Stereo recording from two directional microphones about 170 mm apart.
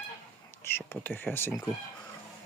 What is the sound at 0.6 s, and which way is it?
Speech, 15° left (ahead or behind).